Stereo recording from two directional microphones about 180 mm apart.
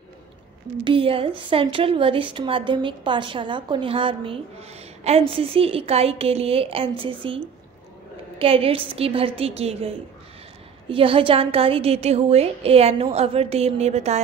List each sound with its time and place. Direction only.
0.8 s a woman's voice: 30° right (ahead or behind)